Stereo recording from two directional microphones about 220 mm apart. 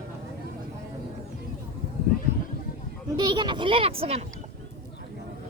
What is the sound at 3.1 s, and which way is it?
A child's voice, 20° right (ahead or behind).